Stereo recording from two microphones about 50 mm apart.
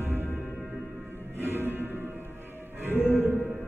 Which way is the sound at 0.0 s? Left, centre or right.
Right.